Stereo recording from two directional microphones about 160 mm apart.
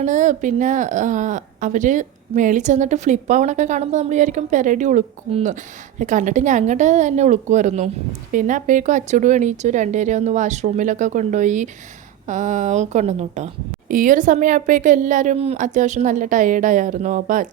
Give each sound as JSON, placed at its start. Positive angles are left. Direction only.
{"t": 0.0, "sound": "a woman's voice", "side_deg": -50}
{"t": 13.8, "sound": "a woman's voice", "side_deg": -60}